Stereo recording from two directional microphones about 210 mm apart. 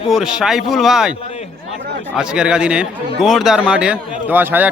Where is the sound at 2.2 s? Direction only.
5° right (ahead or behind).